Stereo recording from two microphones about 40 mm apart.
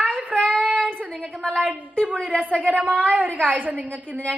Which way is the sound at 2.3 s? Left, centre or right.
Left.